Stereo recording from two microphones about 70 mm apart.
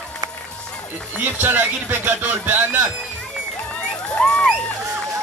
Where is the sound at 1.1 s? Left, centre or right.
Right.